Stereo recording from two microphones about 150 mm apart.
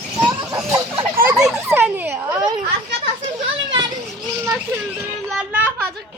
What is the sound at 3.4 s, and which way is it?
Children playing, 35° right (ahead or behind).